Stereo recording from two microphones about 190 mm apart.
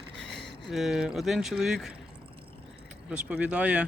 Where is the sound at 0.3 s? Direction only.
60° right (ahead or behind).